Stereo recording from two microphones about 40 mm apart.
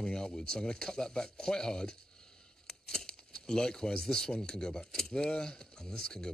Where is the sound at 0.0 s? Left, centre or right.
Centre.